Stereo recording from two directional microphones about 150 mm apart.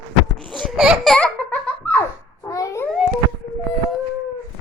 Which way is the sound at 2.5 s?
20° left (ahead or behind).